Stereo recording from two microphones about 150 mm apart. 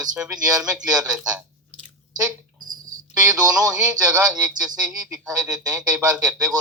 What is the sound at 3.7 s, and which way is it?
Speech, 5° right (ahead or behind).